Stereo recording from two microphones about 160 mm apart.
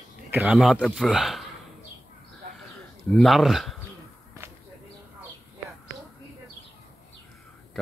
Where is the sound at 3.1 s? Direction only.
Centre (ahead or behind).